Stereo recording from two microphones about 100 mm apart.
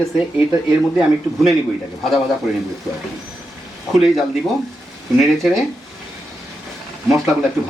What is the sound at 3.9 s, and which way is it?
Speech, centre (ahead or behind).